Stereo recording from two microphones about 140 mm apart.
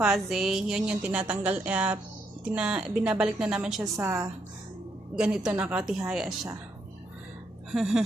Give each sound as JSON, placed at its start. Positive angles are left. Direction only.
{"t": 0.0, "sound": "speech", "side_deg": -5}
{"t": 3.9, "sound": "a woman's voice", "side_deg": -20}
{"t": 5.1, "sound": "a woman's voice", "side_deg": -5}
{"t": 7.7, "sound": "a woman's voice", "side_deg": 0}